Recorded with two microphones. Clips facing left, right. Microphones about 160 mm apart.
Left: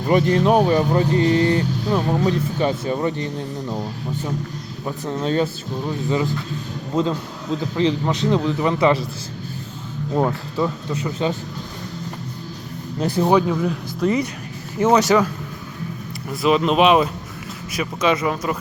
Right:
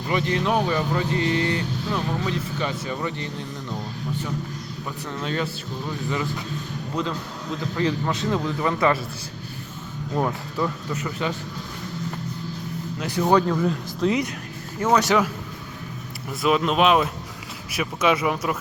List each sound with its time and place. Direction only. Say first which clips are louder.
0.1 s speech: left 7 dB; 40° left (ahead or behind)
4.9 s a man's voice: left 7 dB; 30° left (ahead or behind)
7.8 s a man's voice: left 4 dB; 20° left (ahead or behind)
10.2 s a man's voice: left 4 dB; 20° left (ahead or behind)
13.0 s speech: left 6 dB; 30° left (ahead or behind)
13.2 s speech: left 1 dB; 5° left (ahead or behind)
16.3 s speech: left 4 dB; centre (ahead or behind)